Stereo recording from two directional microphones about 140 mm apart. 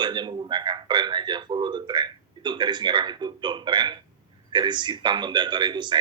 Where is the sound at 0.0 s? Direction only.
30° right (ahead or behind).